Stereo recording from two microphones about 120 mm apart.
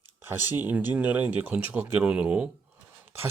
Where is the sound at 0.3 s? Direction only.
15° right (ahead or behind).